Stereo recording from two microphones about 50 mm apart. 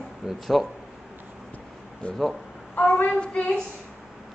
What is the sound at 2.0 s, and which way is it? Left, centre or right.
Child singing, left.